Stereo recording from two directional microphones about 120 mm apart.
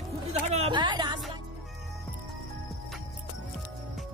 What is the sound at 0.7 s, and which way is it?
Speech, 40° right (ahead or behind).